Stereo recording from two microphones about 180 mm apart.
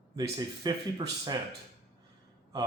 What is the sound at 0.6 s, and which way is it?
Speech, 25° right (ahead or behind).